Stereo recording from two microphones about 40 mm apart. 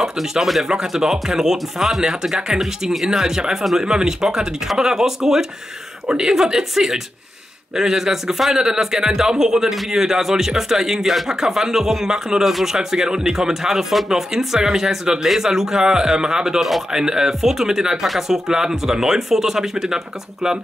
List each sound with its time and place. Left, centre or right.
0.0 s speech: centre
18.0 s speech: centre
18.5 s speech: centre